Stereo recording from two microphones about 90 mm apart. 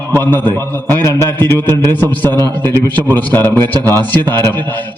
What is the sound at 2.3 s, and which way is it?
Speech, 45° right (ahead or behind).